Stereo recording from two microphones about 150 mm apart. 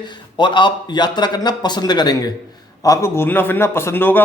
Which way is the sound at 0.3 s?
30° left (ahead or behind).